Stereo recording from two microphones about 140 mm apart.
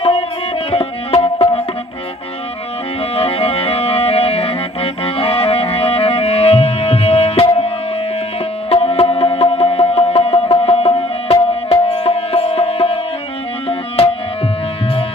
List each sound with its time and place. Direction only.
0.0 s music: 45° left (ahead or behind)
3.2 s music: 45° left (ahead or behind)
8.7 s music: 45° left (ahead or behind)